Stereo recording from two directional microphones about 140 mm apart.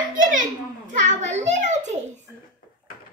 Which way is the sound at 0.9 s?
60° right (ahead or behind).